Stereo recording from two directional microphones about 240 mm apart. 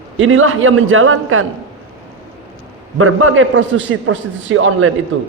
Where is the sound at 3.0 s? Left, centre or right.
Right.